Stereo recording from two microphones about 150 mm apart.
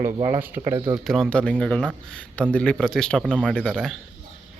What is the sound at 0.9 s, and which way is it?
Speech, centre (ahead or behind).